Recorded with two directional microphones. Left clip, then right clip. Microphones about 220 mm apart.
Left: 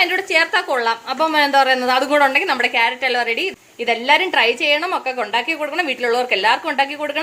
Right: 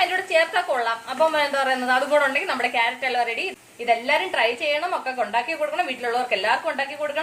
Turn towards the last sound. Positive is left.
turn(degrees=50)  # may be behind; listen again after turning